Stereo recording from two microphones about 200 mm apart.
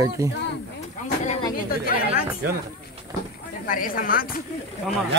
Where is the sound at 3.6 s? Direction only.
45° left (ahead or behind).